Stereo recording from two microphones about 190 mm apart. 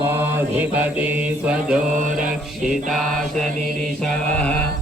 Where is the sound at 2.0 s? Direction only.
45° right (ahead or behind).